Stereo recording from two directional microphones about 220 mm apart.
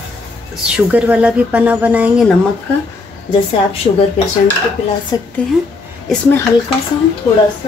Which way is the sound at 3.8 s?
25° left (ahead or behind).